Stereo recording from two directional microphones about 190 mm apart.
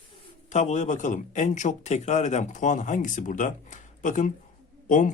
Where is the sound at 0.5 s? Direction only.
40° left (ahead or behind).